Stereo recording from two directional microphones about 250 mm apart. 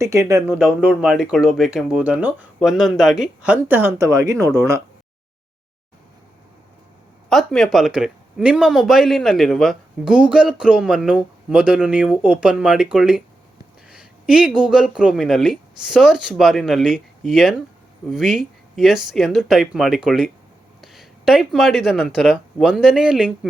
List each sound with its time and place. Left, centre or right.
0.0 s a man's voice: centre
7.3 s a man's voice: centre